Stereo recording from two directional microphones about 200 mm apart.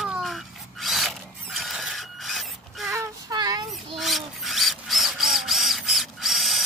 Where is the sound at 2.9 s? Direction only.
15° right (ahead or behind).